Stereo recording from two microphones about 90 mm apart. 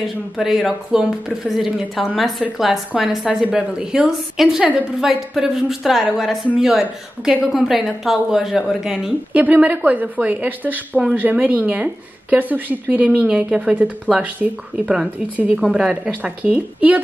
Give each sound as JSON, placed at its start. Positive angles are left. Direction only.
{"t": 0.4, "sound": "speech", "side_deg": 0}
{"t": 9.3, "sound": "speech", "side_deg": -15}